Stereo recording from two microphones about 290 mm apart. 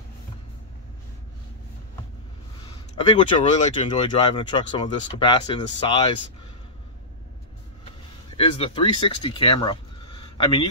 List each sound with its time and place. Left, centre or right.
3.1 s speech: centre
8.4 s speech: centre